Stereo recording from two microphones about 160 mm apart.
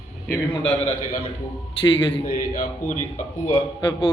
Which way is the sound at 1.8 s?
35° left (ahead or behind).